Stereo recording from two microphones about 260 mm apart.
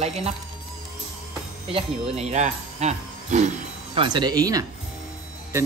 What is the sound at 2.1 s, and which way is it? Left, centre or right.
Speech, right.